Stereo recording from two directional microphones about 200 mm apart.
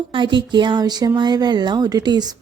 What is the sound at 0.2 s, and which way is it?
Speech, 20° right (ahead or behind).